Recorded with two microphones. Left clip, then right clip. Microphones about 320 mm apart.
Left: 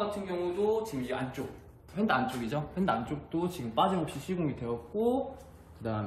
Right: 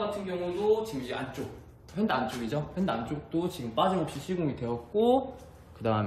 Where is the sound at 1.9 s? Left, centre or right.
Centre.